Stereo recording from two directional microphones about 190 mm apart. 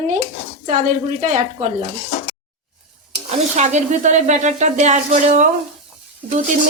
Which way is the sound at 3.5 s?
40° right (ahead or behind).